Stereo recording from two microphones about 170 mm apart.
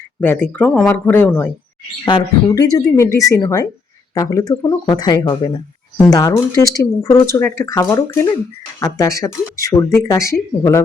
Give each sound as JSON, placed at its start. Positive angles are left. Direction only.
{"t": 0.2, "sound": "speech", "side_deg": 10}
{"t": 2.0, "sound": "speech", "side_deg": 25}